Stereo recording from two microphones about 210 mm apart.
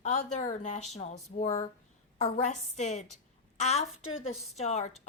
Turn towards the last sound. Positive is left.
turn(degrees=35)  # may be behind; listen again after turning